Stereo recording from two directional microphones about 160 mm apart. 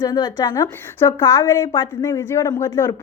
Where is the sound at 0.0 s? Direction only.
25° left (ahead or behind).